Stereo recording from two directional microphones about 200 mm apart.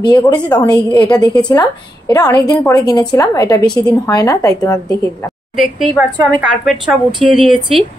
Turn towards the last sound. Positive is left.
turn(degrees=0)  # may be behind; listen again after turning